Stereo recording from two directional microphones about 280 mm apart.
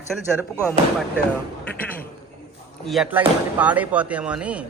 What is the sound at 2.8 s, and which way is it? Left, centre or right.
Speech, centre.